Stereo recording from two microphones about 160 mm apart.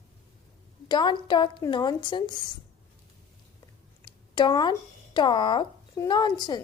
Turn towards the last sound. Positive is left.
turn(degrees=25)  # may be behind; listen again after turning